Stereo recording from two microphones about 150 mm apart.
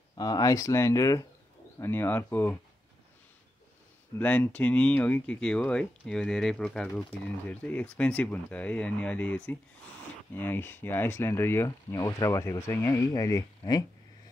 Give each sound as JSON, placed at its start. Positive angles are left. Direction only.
{"t": 0.1, "sound": "speech", "side_deg": 25}
{"t": 4.2, "sound": "speech", "side_deg": 10}